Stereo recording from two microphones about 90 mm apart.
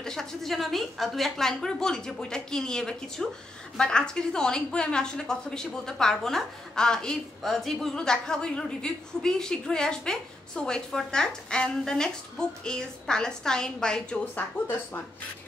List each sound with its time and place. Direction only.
0.0 s a woman's voice: 5° left (ahead or behind)
14.3 s speech: 25° left (ahead or behind)